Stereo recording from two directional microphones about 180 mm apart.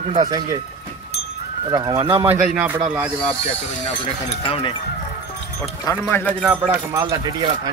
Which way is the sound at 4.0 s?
30° left (ahead or behind).